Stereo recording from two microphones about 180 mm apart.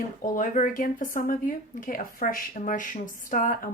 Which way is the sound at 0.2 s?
45° left (ahead or behind).